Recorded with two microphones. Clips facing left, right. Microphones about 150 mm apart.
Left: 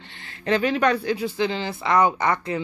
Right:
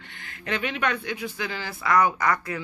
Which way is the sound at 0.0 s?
30° left (ahead or behind).